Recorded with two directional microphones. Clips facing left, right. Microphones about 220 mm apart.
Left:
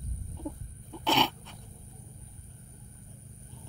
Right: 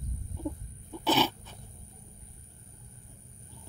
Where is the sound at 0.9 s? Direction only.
5° right (ahead or behind).